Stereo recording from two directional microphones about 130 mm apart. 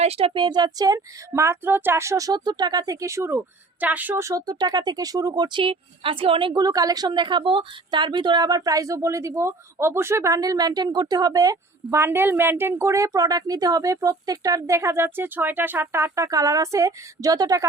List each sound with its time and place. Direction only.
0.0 s speech: 50° right (ahead or behind); by 17.7 s 30° right (ahead or behind)